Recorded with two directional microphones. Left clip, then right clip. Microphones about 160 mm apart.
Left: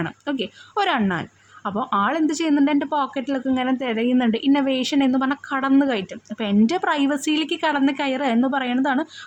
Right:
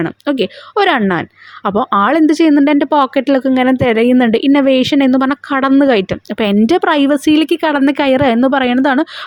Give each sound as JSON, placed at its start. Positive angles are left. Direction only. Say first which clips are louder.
{"t": 0.0, "sound": "a woman's voice", "louder": "right 11 dB", "side_deg": -40}